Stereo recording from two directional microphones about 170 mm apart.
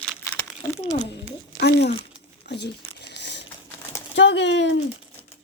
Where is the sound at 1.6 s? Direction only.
75° left (ahead or behind).